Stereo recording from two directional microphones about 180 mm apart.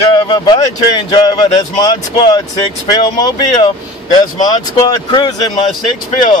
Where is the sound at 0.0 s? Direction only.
25° left (ahead or behind).